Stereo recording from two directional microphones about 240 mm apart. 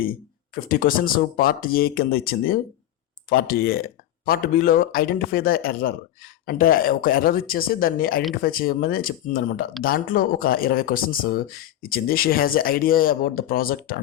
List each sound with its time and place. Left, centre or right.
0.5 s speech: left